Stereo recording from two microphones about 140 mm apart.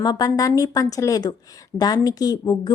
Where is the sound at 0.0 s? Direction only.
30° left (ahead or behind).